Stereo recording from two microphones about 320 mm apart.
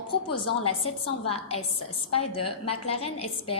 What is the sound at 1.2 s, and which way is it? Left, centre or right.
A woman's voice, centre.